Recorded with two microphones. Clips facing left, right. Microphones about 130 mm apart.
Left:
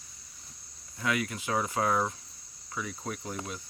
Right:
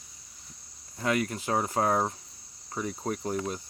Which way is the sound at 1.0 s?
40° right (ahead or behind).